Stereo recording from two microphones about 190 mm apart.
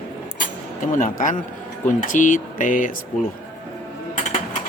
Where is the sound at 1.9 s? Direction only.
45° left (ahead or behind).